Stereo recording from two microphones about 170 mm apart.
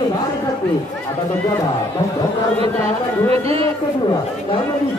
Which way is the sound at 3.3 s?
35° right (ahead or behind).